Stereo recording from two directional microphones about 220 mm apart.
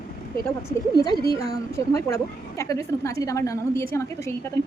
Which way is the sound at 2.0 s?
15° left (ahead or behind).